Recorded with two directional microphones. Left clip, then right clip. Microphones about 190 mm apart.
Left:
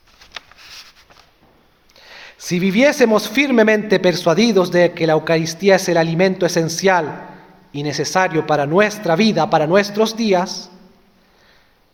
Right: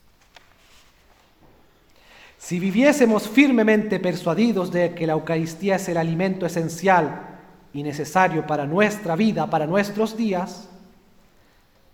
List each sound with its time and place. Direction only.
2.0 s speech: 30° left (ahead or behind)